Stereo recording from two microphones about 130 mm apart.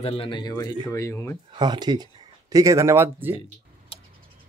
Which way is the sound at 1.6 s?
35° right (ahead or behind).